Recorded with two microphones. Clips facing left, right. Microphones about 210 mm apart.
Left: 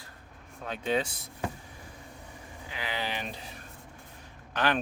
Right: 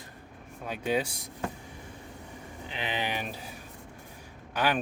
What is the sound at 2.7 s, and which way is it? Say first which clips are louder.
Speech: right 2 dB; 20° right (ahead or behind).